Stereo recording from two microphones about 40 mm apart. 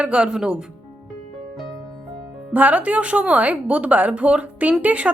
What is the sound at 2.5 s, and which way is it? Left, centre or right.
A woman's voice, right.